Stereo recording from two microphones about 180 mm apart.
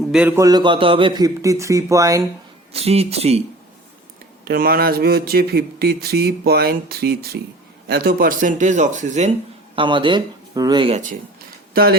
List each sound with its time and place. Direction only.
0.1 s a man's voice: 5° right (ahead or behind)
0.3 s speech: 20° right (ahead or behind)
2.7 s a man's voice: 35° right (ahead or behind)
4.4 s speech: 55° right (ahead or behind); by 9.3 s 40° right (ahead or behind)
9.7 s speech: 25° right (ahead or behind)
10.8 s speech: 45° right (ahead or behind)
11.7 s speech: 60° right (ahead or behind)